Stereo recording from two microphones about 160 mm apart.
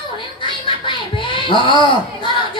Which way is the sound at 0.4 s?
30° left (ahead or behind).